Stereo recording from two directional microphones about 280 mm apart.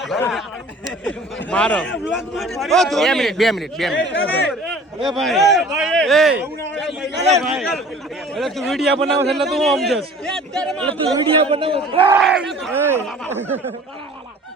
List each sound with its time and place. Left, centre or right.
0.0 s speech: centre
1.5 s a man's voice: centre
7.3 s a man's voice: centre
10.8 s a man's voice: centre
12.0 s speech: centre